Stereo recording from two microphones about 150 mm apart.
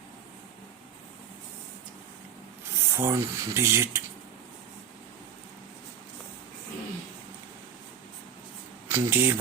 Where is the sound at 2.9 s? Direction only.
15° right (ahead or behind).